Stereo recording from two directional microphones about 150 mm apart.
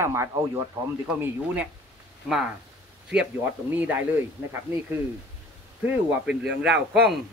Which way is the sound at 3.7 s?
10° right (ahead or behind).